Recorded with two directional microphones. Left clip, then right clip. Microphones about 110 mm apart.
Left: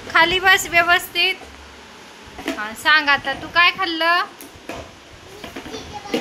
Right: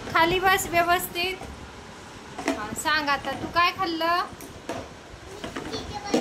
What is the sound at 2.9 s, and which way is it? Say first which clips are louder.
A woman's voice: left 9 dB; 10° left (ahead or behind).